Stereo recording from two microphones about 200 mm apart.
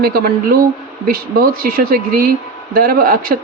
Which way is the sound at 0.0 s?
50° right (ahead or behind).